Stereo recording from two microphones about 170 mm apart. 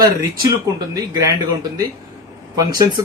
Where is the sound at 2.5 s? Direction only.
20° right (ahead or behind).